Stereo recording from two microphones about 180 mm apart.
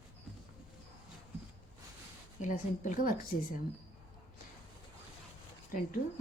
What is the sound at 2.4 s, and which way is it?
Speech, 45° left (ahead or behind).